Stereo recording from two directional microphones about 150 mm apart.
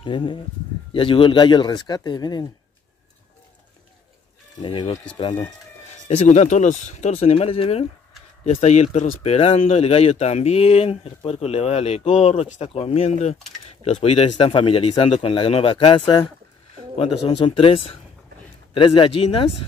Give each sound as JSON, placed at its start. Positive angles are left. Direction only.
{"t": 0.0, "sound": "speech", "side_deg": 35}
{"t": 4.6, "sound": "speech", "side_deg": 35}
{"t": 6.0, "sound": "speech", "side_deg": 50}